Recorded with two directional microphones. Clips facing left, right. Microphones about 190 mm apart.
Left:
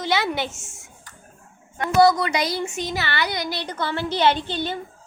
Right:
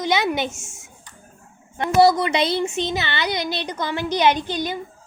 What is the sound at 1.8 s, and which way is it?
A woman's voice, 25° right (ahead or behind).